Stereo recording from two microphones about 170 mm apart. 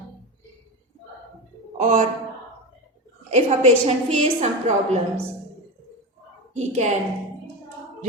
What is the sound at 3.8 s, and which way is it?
Speech, 40° right (ahead or behind).